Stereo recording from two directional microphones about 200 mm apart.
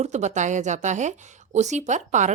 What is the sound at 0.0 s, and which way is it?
Speech, 35° right (ahead or behind).